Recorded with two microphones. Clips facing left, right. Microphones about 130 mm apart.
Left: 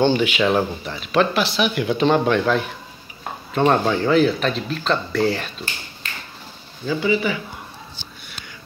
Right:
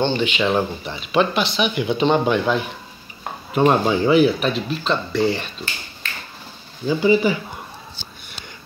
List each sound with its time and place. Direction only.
0.0 s speech: 10° left (ahead or behind)
7.0 s speech: 25° right (ahead or behind)